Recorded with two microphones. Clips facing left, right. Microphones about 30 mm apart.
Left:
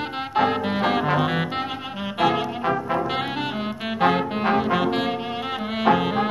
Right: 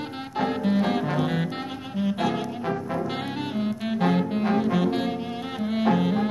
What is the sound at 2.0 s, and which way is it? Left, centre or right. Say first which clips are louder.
Brass instrument: left 5 dB; left.